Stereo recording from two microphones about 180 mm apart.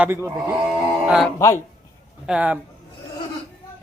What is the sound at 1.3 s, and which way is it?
Speech, 15° left (ahead or behind).